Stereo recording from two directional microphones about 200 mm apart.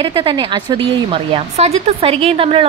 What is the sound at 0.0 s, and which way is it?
Speech, 25° right (ahead or behind).